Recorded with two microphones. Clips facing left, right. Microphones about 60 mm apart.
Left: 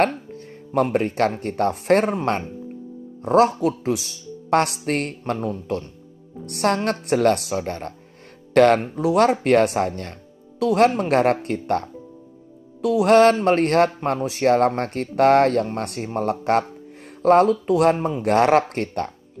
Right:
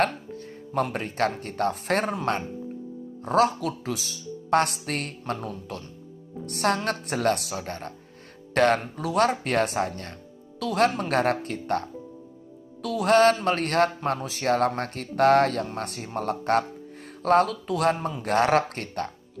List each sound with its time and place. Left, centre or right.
0.0 s music: left
0.8 s speech: left
6.4 s speech: left
13.0 s speech: left
16.1 s speech: left
18.2 s speech: left